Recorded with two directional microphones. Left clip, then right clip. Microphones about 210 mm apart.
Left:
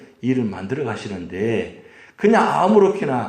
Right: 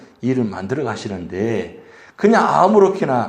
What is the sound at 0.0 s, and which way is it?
Speech, 15° right (ahead or behind).